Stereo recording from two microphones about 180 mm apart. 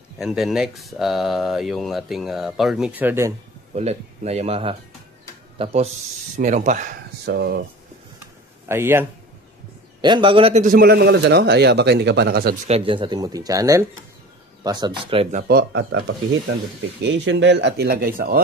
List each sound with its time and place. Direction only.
0.2 s speech: centre (ahead or behind)
3.7 s speech: 35° right (ahead or behind)
7.2 s speech: 60° right (ahead or behind)
8.6 s a man's voice: 15° right (ahead or behind)
10.0 s speech: 25° right (ahead or behind)
10.6 s a man's voice: 55° right (ahead or behind)
12.6 s speech: 30° right (ahead or behind)
15.4 s a man's voice: 65° right (ahead or behind)